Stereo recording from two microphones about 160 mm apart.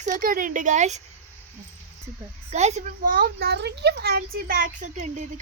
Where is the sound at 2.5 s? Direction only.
45° right (ahead or behind).